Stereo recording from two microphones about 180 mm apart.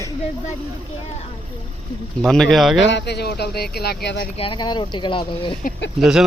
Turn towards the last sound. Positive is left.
turn(degrees=0)  # may be behind; listen again after turning